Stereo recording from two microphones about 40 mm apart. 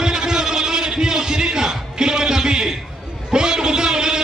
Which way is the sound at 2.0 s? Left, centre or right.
Centre.